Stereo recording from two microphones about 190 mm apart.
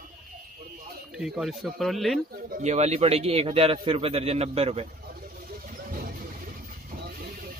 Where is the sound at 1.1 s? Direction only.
Centre (ahead or behind).